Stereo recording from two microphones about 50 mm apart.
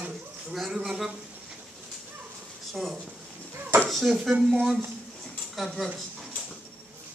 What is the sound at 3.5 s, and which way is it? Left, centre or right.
Dishes, right.